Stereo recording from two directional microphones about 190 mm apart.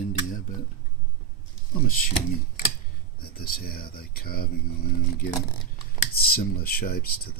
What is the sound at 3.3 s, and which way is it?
Speech, 50° left (ahead or behind).